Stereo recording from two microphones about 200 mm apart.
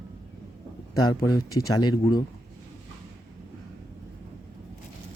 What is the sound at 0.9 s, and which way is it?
Speech, 20° left (ahead or behind).